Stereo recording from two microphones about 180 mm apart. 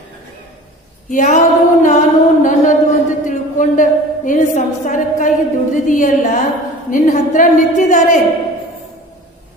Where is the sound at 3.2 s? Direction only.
45° left (ahead or behind).